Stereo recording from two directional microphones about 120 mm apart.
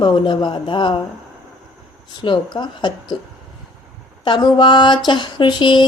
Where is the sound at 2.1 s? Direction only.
40° left (ahead or behind).